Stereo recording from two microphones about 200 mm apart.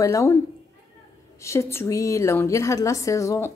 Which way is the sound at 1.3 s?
15° left (ahead or behind).